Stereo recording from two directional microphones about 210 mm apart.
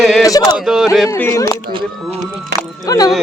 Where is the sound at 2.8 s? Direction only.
15° left (ahead or behind).